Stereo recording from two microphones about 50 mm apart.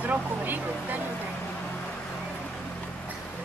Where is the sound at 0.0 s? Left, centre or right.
Right.